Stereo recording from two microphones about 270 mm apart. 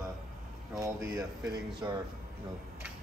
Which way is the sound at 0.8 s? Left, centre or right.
Centre.